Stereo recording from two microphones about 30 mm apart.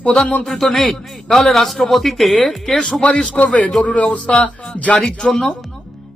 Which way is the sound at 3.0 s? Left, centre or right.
Left.